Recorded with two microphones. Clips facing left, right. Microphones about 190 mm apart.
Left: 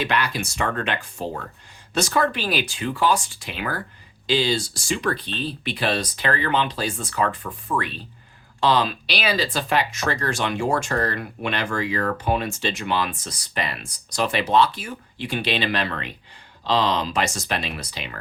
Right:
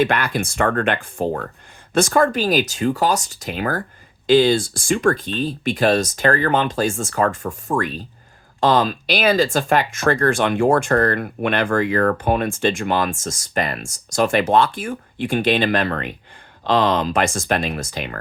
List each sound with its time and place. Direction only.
0.0 s speech: 50° right (ahead or behind)